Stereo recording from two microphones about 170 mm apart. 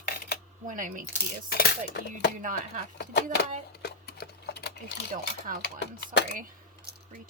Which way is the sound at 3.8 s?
75° left (ahead or behind).